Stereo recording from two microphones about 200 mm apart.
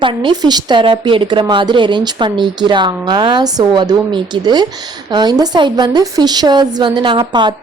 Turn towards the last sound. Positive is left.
turn(degrees=-20)  # may be behind; listen again after turning